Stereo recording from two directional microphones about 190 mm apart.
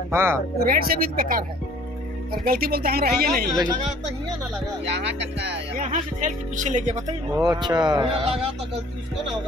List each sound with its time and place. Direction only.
0.1 s speech: 15° right (ahead or behind)
0.6 s speech: 50° right (ahead or behind)
2.4 s speech: 50° right (ahead or behind)
4.8 s speech: 65° right (ahead or behind)
5.8 s speech: 40° right (ahead or behind)
6.9 s speech: 20° right (ahead or behind)